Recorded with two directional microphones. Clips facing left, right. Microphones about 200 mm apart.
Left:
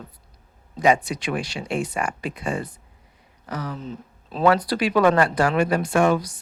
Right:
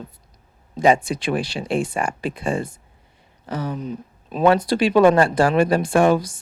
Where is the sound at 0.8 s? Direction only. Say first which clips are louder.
Right 3 dB; 30° right (ahead or behind).